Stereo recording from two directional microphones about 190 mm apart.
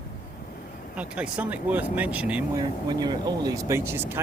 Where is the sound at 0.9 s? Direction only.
5° right (ahead or behind).